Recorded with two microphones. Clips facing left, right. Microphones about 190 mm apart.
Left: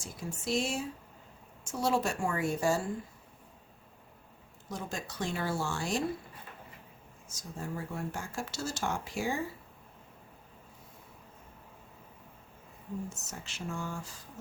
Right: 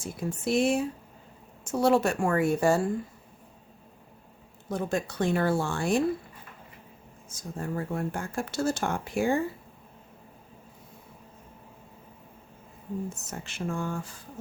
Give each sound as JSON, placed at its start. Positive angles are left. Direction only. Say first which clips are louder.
{"t": 0.0, "sound": "speech", "louder": "right 8 dB", "side_deg": -60}
{"t": 4.7, "sound": "speech", "louder": "right 10 dB", "side_deg": -55}
{"t": 7.3, "sound": "speech", "louder": "right 5 dB", "side_deg": -55}
{"t": 13.1, "sound": "speech", "louder": "right 6 dB", "side_deg": -55}